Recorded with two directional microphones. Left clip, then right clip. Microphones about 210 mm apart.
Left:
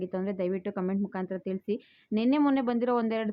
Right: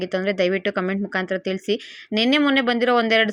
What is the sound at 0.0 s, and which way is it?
Speech, 15° right (ahead or behind).